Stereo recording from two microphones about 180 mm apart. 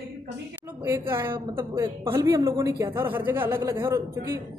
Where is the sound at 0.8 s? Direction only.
15° right (ahead or behind).